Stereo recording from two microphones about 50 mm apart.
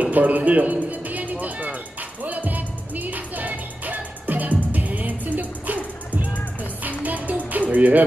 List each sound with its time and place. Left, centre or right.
0.0 s music: right
6.8 s music: right